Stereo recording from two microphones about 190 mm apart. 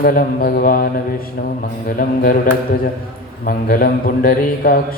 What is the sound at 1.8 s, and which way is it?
Mantra, 50° left (ahead or behind).